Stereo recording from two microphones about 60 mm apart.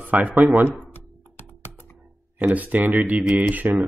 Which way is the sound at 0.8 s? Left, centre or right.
Left.